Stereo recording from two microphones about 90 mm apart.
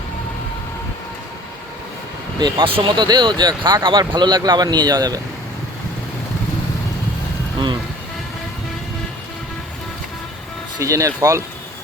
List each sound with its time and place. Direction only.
2.4 s speech: 80° right
3.0 s speech: 55° right (ahead or behind)
10.8 s speech: 35° right (ahead or behind)